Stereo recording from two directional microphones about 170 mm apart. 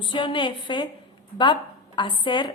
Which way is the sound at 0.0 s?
30° left (ahead or behind).